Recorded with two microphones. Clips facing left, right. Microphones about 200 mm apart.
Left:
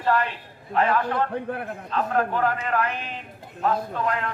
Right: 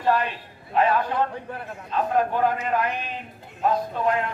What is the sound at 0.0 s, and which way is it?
A man's voice, 15° right (ahead or behind).